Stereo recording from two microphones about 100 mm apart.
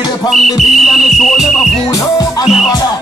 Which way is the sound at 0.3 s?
Centre (ahead or behind).